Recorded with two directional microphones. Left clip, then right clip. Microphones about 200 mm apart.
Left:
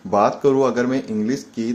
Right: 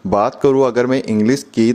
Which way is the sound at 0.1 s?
50° right (ahead or behind).